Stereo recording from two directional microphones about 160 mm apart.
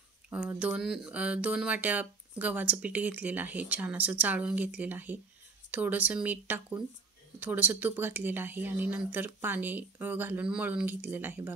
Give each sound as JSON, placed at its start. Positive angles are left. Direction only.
{"t": 0.3, "sound": "speech", "side_deg": -10}